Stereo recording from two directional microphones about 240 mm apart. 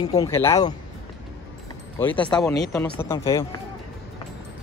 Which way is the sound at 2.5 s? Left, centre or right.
Centre.